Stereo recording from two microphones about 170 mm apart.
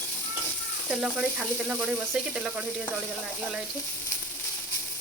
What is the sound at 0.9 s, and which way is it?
Speech, 5° right (ahead or behind).